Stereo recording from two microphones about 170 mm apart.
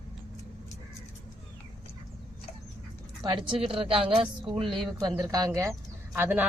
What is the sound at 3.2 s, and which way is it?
A woman's voice, 30° right (ahead or behind).